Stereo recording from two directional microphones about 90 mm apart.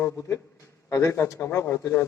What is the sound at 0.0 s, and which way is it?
A man's voice, 35° left (ahead or behind).